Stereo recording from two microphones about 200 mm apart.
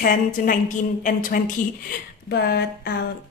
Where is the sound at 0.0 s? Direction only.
45° left (ahead or behind).